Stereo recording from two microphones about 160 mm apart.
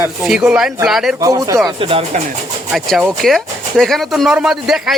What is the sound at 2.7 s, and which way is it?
Speech, centre (ahead or behind).